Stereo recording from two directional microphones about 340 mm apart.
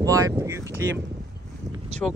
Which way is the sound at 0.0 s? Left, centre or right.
Centre.